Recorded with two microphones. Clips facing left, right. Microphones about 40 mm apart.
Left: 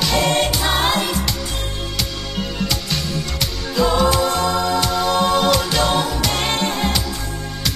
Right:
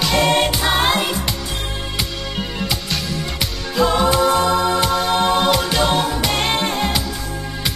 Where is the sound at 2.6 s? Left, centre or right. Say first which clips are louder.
Even; centre.